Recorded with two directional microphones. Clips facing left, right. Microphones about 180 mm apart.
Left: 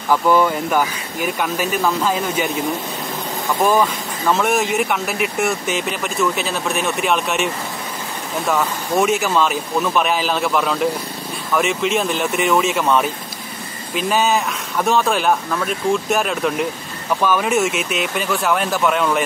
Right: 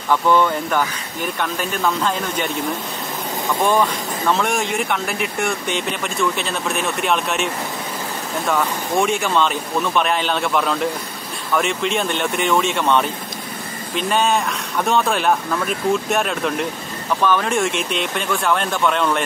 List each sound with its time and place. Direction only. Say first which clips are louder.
0.1 s speech: left 1 dB; 10° left (ahead or behind)
4.3 s speech: left 3 dB; centre (ahead or behind)